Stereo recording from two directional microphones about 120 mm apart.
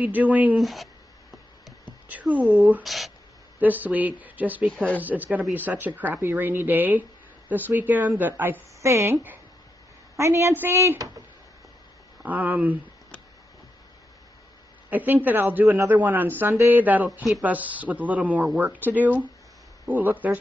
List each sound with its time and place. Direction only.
0.0 s speech: 15° right (ahead or behind)
0.6 s speech: centre (ahead or behind)
1.9 s speech: 10° right (ahead or behind)
2.8 s speech: centre (ahead or behind)
3.5 s a woman's voice: 15° right (ahead or behind)
12.2 s speech: 15° right (ahead or behind)
14.9 s speech: 15° right (ahead or behind)